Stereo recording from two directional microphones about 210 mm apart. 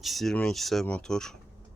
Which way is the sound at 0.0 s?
Centre (ahead or behind).